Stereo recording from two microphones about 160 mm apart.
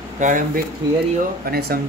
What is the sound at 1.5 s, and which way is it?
Speech, 70° right (ahead or behind).